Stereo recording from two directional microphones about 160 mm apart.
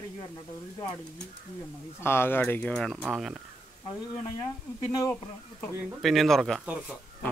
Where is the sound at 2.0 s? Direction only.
15° left (ahead or behind); by 3.3 s centre (ahead or behind).